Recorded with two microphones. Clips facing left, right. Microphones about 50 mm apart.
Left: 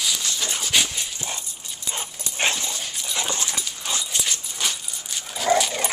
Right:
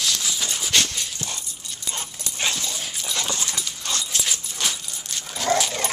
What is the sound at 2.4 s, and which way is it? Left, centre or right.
Dog, left.